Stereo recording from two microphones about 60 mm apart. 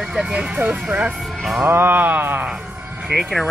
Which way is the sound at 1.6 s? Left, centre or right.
Right.